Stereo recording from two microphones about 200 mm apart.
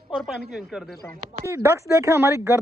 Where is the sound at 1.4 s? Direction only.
15° right (ahead or behind).